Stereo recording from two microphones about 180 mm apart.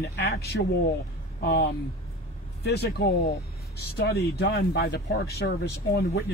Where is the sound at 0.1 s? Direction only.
60° left (ahead or behind).